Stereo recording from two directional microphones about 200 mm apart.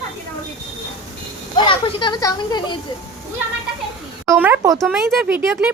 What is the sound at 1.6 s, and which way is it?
Speech, 25° left (ahead or behind).